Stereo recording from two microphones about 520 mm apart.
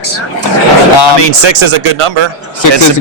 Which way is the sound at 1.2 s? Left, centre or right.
Right.